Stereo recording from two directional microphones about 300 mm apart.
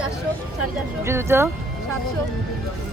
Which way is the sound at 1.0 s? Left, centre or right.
Centre.